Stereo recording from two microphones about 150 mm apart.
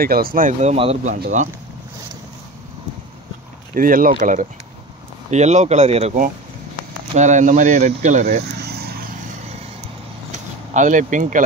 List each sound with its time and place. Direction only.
0.0 s speech: 80° right; by 1.1 s 45° right (ahead or behind)
1.1 s speech: 60° right (ahead or behind)
3.7 s speech: 70° right (ahead or behind); by 6.1 s 45° right (ahead or behind)
7.2 s speech: 55° right (ahead or behind)
8.5 s vehicle: 90° right
10.3 s speech: 55° right (ahead or behind)